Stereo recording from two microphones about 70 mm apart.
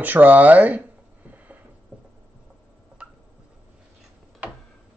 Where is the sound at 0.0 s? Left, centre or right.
Right.